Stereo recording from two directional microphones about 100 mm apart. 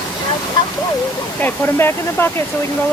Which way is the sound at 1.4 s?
25° left (ahead or behind).